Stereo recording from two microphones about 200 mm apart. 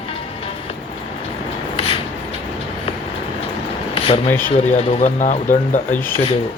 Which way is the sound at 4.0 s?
30° left (ahead or behind).